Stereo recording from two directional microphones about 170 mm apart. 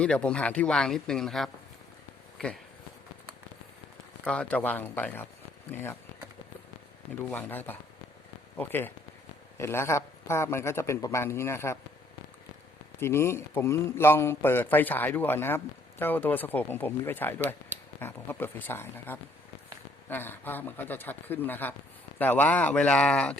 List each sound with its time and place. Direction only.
0.0 s a man's voice: 5° left (ahead or behind)
4.2 s a man's voice: 5° left (ahead or behind)
7.3 s a man's voice: 10° left (ahead or behind)
13.0 s a man's voice: 15° left (ahead or behind)